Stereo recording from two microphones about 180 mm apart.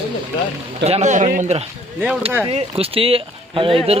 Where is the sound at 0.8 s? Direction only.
40° right (ahead or behind).